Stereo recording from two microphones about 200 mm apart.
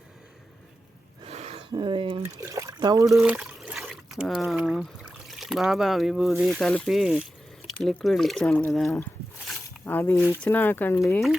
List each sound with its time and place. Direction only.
1.2 s gasp: 30° right (ahead or behind)
1.7 s speech: 25° right (ahead or behind)
2.2 s speech: 15° right (ahead or behind); by 9.0 s centre (ahead or behind)
9.6 s a sound: 10° left (ahead or behind)
10.2 s speech: centre (ahead or behind)